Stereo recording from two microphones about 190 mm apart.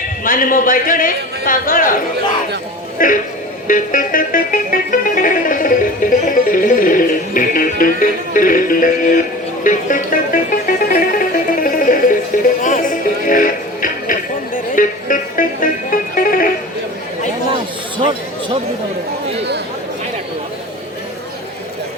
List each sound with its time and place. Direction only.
0.3 s a man's voice: 45° left (ahead or behind)
3.0 s a man's voice: 45° left (ahead or behind)
3.7 s music: 45° left (ahead or behind)
17.9 s a sound: 25° right (ahead or behind)